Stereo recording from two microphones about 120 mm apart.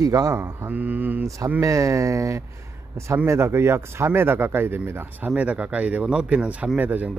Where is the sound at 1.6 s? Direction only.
25° right (ahead or behind).